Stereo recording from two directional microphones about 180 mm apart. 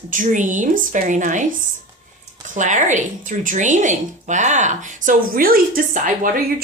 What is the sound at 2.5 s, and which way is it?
Speech, 45° right (ahead or behind).